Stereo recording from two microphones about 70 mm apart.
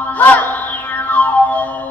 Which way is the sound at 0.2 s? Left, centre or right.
Left.